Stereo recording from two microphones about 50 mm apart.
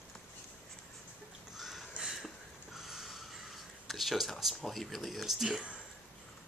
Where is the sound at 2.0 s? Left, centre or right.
Centre.